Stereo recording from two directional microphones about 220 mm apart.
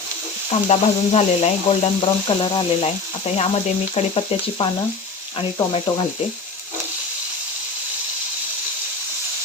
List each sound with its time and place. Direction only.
0.7 s speech: 30° left (ahead or behind)